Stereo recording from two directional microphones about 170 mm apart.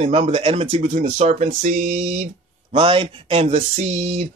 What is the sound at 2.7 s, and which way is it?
Speech, 30° right (ahead or behind).